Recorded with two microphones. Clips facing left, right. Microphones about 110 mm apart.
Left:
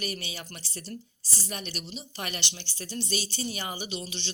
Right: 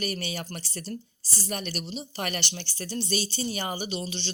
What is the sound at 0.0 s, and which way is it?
Speech, 45° right (ahead or behind).